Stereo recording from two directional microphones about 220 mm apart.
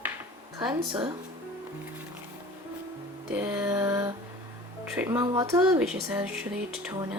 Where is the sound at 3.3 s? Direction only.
5° right (ahead or behind).